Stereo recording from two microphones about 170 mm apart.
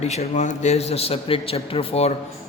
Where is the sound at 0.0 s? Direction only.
40° left (ahead or behind).